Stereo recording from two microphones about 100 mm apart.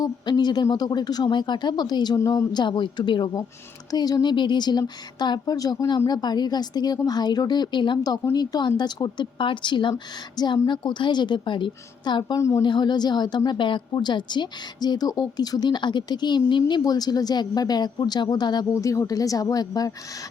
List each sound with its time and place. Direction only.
0.0 s a woman's voice: 45° left (ahead or behind)
12.4 s a woman's voice: 30° left (ahead or behind)
12.6 s a woman's voice: 50° left (ahead or behind)
18.7 s speech: 35° left (ahead or behind)